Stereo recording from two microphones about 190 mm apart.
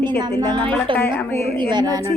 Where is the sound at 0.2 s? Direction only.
20° right (ahead or behind).